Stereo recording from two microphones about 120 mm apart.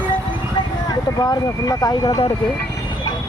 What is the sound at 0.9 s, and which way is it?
Speech, 30° left (ahead or behind).